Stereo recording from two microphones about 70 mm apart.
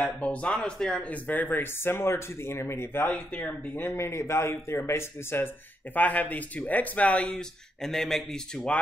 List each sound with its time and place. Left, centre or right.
0.0 s speech: centre; by 3.1 s left
3.1 s speech: centre
3.8 s speech: left
5.9 s speech: left; by 8.7 s centre